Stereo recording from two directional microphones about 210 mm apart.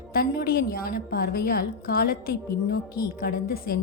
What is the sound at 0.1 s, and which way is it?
A woman's voice, 45° left (ahead or behind).